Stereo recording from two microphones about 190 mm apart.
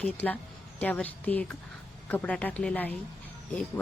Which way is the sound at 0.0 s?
10° left (ahead or behind).